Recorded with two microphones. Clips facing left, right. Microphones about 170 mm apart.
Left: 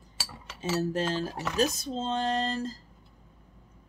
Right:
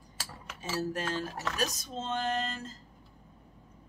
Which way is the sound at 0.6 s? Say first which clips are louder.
Left 5 dB; 25° left (ahead or behind).